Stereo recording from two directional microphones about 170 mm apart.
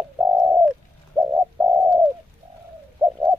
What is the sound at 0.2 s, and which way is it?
Bird, 10° right (ahead or behind).